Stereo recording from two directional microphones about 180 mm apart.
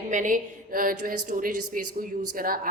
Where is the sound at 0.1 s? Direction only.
45° right (ahead or behind).